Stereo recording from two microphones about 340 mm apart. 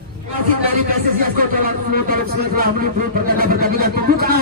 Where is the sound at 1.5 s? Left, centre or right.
Right.